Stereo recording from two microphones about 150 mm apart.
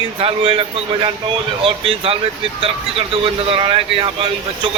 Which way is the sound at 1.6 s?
40° right (ahead or behind).